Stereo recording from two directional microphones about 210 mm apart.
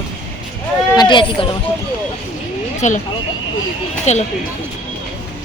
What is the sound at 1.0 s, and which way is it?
Speech, 20° left (ahead or behind).